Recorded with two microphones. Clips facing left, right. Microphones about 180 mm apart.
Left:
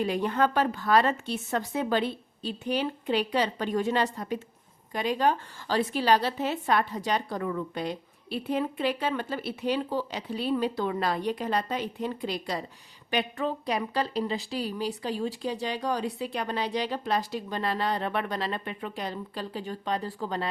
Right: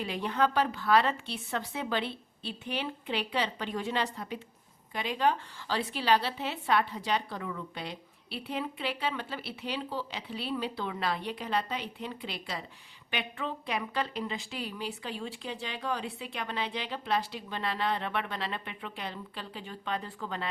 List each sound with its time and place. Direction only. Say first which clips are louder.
0.0 s a woman's voice: left 4 dB; 45° left (ahead or behind)